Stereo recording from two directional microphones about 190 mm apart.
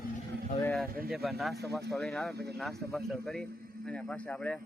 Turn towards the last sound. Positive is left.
turn(degrees=5)  # may be behind; listen again after turning